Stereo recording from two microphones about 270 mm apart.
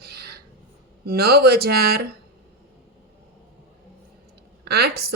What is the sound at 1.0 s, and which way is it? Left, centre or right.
Speech, right.